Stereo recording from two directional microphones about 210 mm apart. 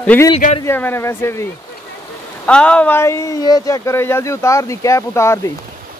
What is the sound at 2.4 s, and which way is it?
Speech, 5° left (ahead or behind).